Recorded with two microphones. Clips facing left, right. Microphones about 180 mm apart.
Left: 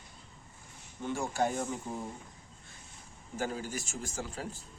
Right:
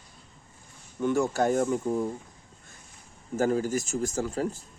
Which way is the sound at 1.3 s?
50° right (ahead or behind).